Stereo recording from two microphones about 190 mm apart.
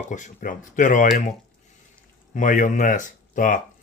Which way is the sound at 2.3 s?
45° left (ahead or behind).